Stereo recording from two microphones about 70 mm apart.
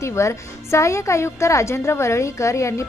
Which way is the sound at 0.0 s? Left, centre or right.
Left.